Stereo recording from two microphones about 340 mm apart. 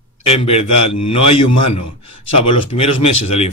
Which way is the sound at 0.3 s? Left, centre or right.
Centre.